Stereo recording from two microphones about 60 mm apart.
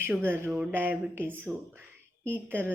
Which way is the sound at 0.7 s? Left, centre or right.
Right.